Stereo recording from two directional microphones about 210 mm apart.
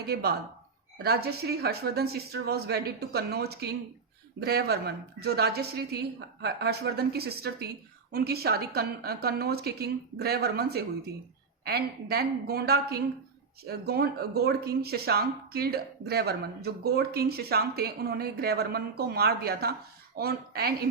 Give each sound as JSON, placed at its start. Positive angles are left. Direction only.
{"t": 0.0, "sound": "speech", "side_deg": -50}